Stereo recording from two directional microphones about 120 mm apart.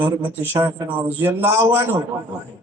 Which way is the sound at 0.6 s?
15° right (ahead or behind).